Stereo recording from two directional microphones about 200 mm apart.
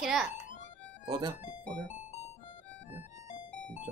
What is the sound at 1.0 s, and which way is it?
Speech, 20° right (ahead or behind).